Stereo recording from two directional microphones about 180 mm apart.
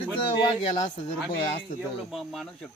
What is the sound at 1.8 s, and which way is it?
Speech, centre (ahead or behind).